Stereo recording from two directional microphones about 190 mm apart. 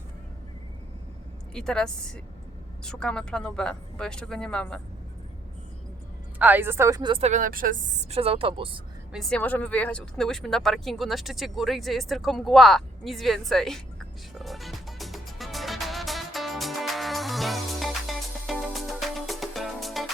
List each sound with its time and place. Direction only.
1.5 s speech: 5° left (ahead or behind)
6.4 s a woman's voice: 10° right (ahead or behind); by 8.0 s 45° right (ahead or behind)
8.1 s a woman's voice: 30° right (ahead or behind)
9.1 s speech: 5° left (ahead or behind)
14.3 s music: centre (ahead or behind)